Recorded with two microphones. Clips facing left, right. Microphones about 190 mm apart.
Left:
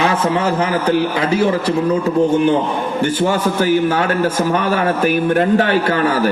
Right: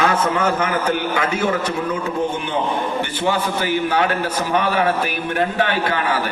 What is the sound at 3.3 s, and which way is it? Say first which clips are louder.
A man's voice: left 5 dB; 45° left (ahead or behind).